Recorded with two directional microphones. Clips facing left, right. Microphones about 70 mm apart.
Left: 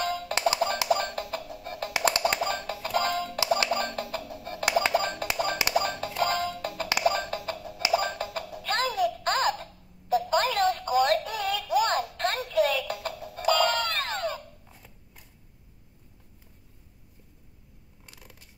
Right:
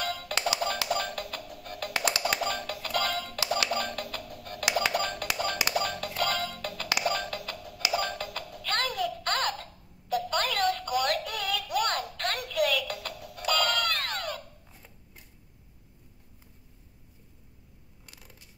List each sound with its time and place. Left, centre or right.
0.1 s music: left